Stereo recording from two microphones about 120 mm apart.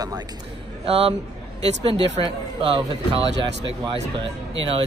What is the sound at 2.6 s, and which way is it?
A man's voice, 50° right (ahead or behind).